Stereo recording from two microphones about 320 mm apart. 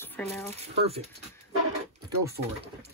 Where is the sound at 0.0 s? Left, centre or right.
Centre.